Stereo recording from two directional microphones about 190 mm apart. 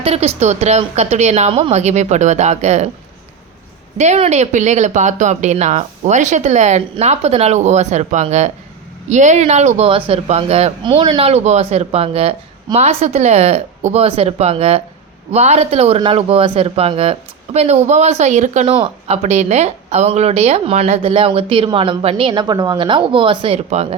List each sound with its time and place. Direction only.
0.0 s speech: 30° right (ahead or behind)
3.9 s speech: 35° right (ahead or behind)
11.2 s speech: 35° right (ahead or behind)